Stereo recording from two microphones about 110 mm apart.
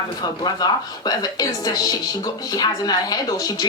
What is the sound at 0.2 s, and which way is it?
A woman's voice, 35° left (ahead or behind).